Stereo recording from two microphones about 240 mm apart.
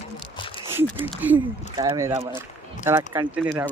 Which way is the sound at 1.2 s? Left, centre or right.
Centre.